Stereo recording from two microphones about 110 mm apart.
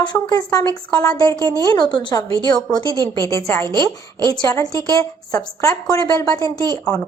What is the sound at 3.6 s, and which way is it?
Speech, 40° right (ahead or behind).